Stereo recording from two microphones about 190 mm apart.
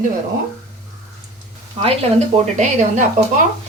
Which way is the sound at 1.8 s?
25° right (ahead or behind).